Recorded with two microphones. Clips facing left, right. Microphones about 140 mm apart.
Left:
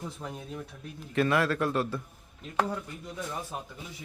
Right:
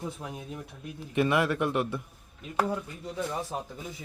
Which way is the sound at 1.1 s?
20° right (ahead or behind).